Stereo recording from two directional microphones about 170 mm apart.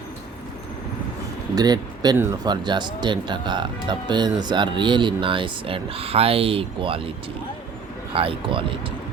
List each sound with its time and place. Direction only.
1.5 s speech: 25° right (ahead or behind)
2.5 s speech: 25° right (ahead or behind)
8.1 s speech: 30° right (ahead or behind)